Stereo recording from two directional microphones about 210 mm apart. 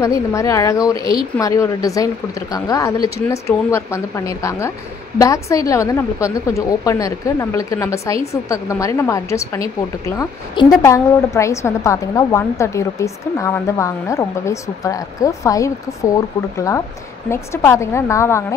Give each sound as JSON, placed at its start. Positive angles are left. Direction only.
{"t": 0.0, "sound": "a woman's voice", "side_deg": 15}